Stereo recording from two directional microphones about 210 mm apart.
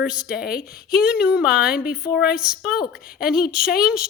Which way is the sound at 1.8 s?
45° left (ahead or behind).